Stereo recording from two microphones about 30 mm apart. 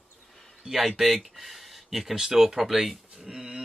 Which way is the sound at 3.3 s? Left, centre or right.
Right.